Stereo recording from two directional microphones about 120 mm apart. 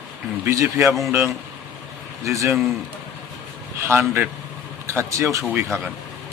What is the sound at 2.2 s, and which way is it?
Speech, 25° right (ahead or behind).